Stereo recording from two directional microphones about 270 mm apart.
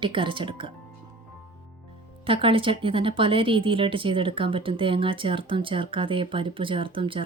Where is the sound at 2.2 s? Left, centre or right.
Centre.